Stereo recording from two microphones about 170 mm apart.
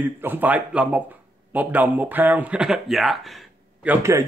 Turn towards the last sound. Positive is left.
turn(degrees=-15)  # may be behind; listen again after turning